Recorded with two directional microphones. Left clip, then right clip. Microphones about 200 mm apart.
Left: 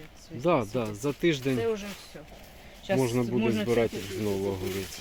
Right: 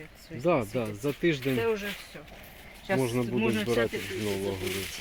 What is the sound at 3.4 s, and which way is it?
Speech, 50° left (ahead or behind).